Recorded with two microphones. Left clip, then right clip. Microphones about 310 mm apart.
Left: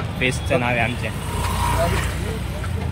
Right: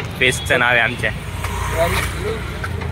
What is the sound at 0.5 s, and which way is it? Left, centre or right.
Speech, right.